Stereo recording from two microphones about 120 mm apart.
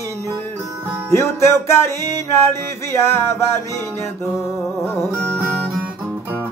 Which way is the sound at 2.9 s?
20° left (ahead or behind).